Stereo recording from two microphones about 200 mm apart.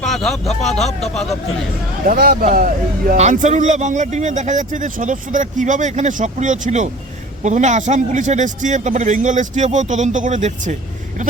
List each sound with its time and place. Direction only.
0.0 s speech: centre (ahead or behind)
2.0 s speech: 50° right (ahead or behind)